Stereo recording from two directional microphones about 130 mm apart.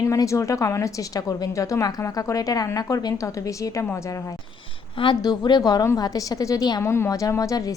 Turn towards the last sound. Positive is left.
turn(degrees=25)  # may be behind; listen again after turning